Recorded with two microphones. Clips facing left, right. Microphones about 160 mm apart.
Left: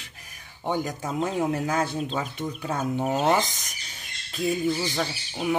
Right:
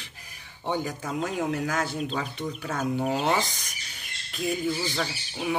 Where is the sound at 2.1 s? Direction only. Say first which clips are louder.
Left 1 dB; 20° left (ahead or behind).